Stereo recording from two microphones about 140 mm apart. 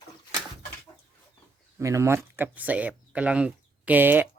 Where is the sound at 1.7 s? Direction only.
20° right (ahead or behind).